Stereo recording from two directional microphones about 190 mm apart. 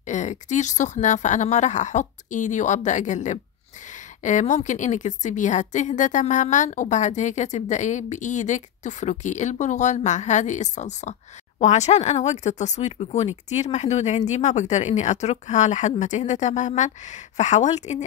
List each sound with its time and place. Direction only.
0.0 s a woman's voice: 40° left (ahead or behind)